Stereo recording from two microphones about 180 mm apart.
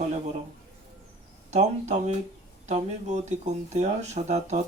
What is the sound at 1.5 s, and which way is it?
Speech, 40° right (ahead or behind).